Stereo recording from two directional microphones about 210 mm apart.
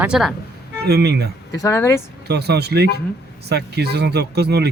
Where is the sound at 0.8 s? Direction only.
50° right (ahead or behind).